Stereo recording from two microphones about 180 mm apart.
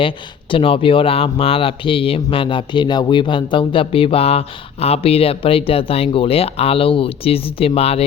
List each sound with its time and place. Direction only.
0.5 s speech: 30° left (ahead or behind)